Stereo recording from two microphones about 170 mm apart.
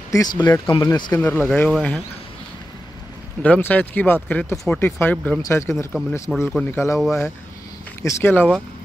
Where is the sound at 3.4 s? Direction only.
10° left (ahead or behind).